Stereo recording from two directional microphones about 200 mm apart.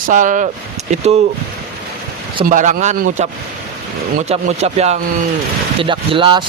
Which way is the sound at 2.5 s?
40° right (ahead or behind).